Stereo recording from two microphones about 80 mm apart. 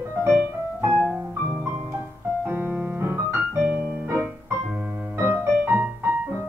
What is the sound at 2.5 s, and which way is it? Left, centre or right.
Music, right.